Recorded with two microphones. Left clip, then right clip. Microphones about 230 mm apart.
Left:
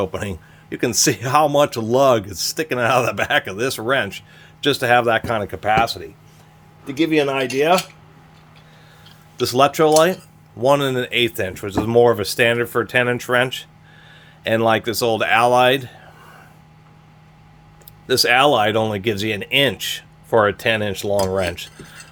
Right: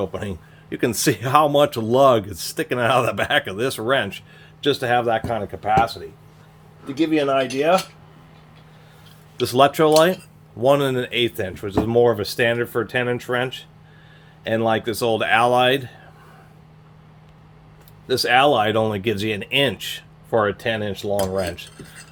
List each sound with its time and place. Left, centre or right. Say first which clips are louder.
0.0 s speech: left 3 dB; left
0.7 s speech: left 2 dB; centre
4.6 s speech: left 3 dB; left
6.9 s speech: left 1 dB; left
9.4 s speech: left 1 dB; centre
18.1 s speech: left 2 dB; left